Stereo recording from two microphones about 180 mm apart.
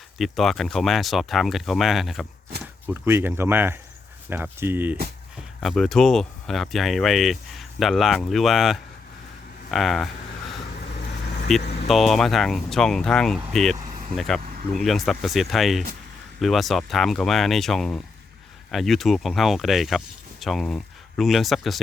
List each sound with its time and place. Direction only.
0.2 s speech: centre (ahead or behind)
2.8 s speech: 10° right (ahead or behind)
5.5 s speech: centre (ahead or behind)
11.6 s vehicle: 65° left (ahead or behind)
11.9 s speech: centre (ahead or behind)